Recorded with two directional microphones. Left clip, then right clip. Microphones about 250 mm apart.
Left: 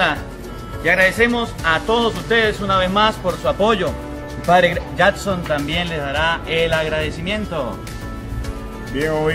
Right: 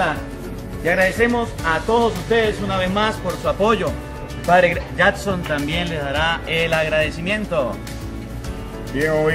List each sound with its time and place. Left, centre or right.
0.8 s speech: left
3.6 s speech: left
4.5 s speech: left
4.9 s speech: left
5.5 s speech: centre
8.9 s speech: centre